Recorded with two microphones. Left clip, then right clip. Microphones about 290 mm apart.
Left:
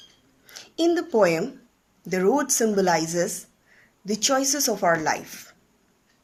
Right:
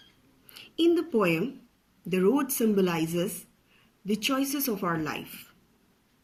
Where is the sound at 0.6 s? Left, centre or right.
Left.